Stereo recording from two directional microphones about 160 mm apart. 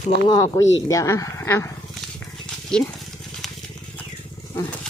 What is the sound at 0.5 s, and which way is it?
Speech, 20° left (ahead or behind).